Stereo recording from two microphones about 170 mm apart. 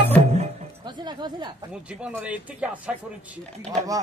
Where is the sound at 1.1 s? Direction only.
25° right (ahead or behind).